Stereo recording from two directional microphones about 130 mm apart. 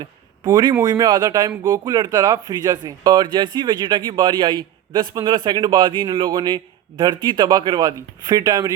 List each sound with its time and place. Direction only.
0.0 s a man's voice: 30° right (ahead or behind)